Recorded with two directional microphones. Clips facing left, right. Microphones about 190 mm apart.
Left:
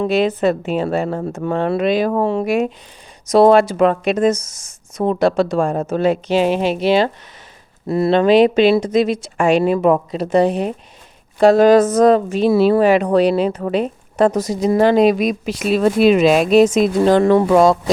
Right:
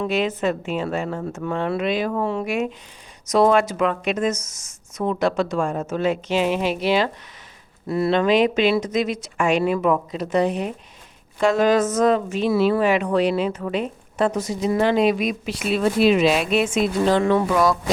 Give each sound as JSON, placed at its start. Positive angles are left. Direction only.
{"t": 0.0, "sound": "a woman's voice", "side_deg": 35}